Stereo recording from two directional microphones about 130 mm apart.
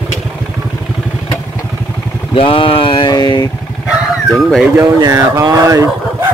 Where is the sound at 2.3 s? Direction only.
45° left (ahead or behind).